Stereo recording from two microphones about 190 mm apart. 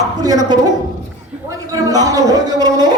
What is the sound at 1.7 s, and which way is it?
Speech, 20° right (ahead or behind).